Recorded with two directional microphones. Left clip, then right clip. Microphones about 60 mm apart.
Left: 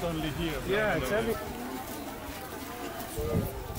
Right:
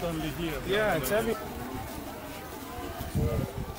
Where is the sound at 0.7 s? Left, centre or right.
Right.